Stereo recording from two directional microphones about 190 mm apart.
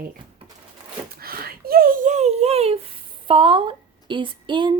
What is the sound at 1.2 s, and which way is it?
A woman's voice, 50° right (ahead or behind).